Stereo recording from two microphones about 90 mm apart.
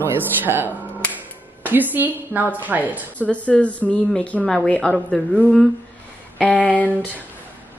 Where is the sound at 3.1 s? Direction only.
15° left (ahead or behind).